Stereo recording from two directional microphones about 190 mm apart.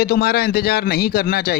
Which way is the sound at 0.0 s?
55° left (ahead or behind).